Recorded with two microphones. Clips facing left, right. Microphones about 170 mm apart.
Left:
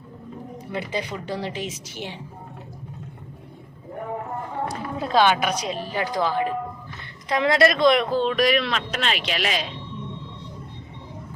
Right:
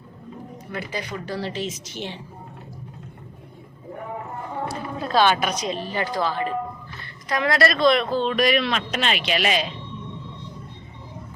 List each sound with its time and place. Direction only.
0.7 s speech: 25° left (ahead or behind)
4.7 s a woman's voice: 20° left (ahead or behind)
7.0 s speech: 25° left (ahead or behind)
8.3 s speech: centre (ahead or behind)